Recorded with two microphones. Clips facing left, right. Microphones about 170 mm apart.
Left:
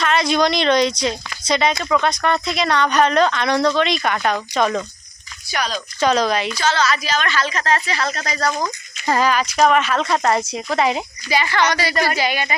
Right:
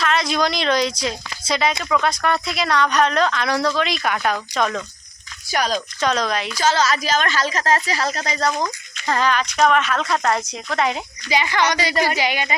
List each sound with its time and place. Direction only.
0.0 s speech: centre (ahead or behind)
5.5 s speech: 45° right (ahead or behind)
6.0 s speech: centre (ahead or behind)
6.6 s a woman's voice: 45° right (ahead or behind)
8.4 s speech: centre (ahead or behind)
11.3 s a woman's voice: 15° right (ahead or behind)